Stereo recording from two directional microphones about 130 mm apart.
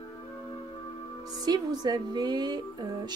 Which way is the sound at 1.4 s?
30° right (ahead or behind).